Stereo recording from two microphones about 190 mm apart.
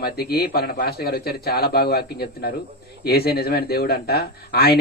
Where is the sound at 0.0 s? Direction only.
55° left (ahead or behind).